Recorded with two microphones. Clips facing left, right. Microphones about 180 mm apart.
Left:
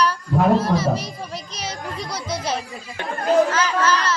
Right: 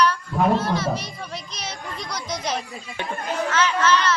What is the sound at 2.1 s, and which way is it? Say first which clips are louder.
Speech: left 1 dB; 30° left (ahead or behind).